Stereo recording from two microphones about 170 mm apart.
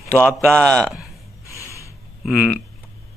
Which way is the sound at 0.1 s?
10° left (ahead or behind).